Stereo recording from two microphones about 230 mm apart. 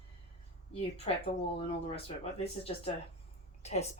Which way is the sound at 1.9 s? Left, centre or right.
Left.